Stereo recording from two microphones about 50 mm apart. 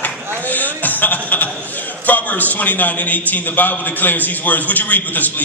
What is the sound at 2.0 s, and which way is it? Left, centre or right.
A man's voice, left.